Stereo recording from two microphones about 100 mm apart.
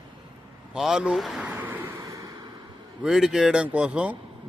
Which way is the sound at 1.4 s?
15° right (ahead or behind).